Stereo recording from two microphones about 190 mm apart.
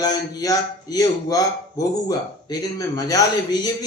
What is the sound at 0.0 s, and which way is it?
A man's voice, 20° left (ahead or behind).